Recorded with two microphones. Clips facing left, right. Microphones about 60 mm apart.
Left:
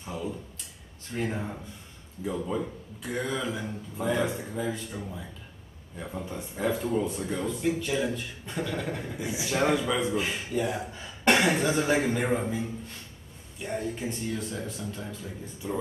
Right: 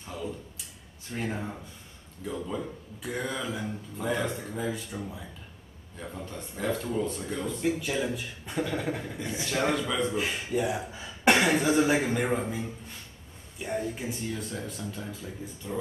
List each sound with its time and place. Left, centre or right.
0.0 s a sound: centre
1.1 s speech: centre
9.0 s speech: centre
13.9 s speech: centre
15.6 s speech: centre